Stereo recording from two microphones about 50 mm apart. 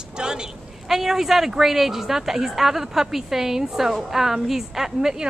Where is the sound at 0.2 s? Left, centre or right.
Centre.